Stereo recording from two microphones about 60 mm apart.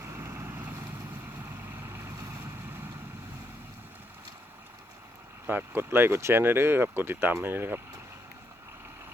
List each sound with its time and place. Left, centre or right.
0.0 s vehicle: right
1.7 s vehicle: right
5.5 s speech: right